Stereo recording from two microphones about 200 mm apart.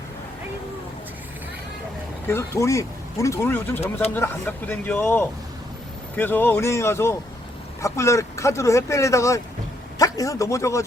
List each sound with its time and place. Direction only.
2.2 s speech: 15° left (ahead or behind)